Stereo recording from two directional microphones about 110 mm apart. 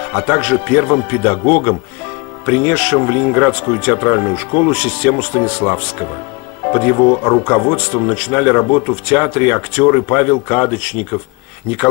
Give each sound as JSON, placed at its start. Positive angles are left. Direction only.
{"t": 0.4, "sound": "speech", "side_deg": 10}